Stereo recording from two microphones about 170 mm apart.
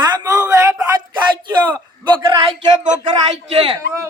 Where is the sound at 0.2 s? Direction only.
20° right (ahead or behind).